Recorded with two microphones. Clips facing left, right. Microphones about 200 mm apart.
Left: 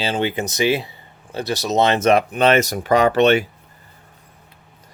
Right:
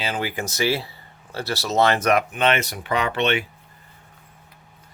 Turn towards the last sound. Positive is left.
turn(degrees=40)  # may be behind; listen again after turning